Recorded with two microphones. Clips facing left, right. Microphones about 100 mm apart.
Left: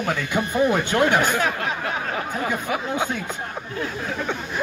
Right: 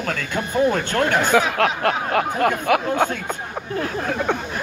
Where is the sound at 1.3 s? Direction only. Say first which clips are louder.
Right 6 dB; 90° right.